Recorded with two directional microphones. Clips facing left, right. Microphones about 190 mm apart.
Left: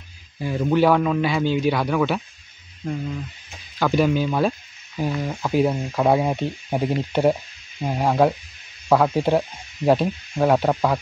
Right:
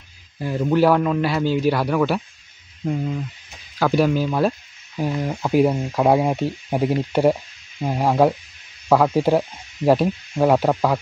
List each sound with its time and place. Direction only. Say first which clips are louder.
0.4 s speech: right 1 dB; centre (ahead or behind)
3.8 s speech: right 1 dB; 5° right (ahead or behind)